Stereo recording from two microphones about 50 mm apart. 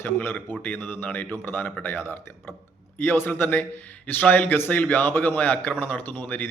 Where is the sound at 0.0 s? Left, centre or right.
Left.